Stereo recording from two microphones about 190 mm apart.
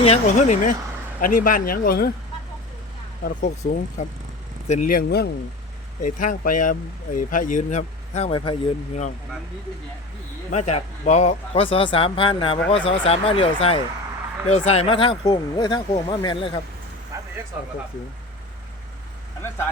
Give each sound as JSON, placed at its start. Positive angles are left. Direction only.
{"t": 0.0, "sound": "speech", "side_deg": 35}
{"t": 3.2, "sound": "speech", "side_deg": 45}
{"t": 6.0, "sound": "speech", "side_deg": 45}
{"t": 10.5, "sound": "speech", "side_deg": 35}